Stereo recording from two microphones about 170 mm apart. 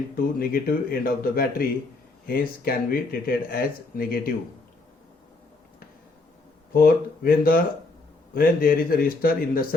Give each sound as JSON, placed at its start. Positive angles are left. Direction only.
{"t": 0.3, "sound": "speech", "side_deg": 60}
{"t": 6.7, "sound": "speech", "side_deg": 60}